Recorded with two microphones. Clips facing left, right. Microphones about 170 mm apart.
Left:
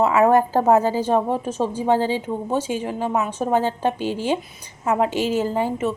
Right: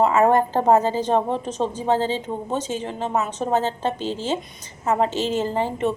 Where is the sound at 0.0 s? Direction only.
5° left (ahead or behind).